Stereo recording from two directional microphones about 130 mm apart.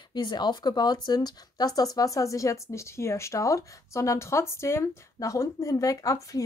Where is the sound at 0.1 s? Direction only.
35° left (ahead or behind).